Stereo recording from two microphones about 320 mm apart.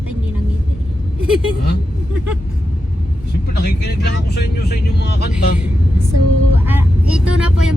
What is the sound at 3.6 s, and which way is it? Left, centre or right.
Speech, left.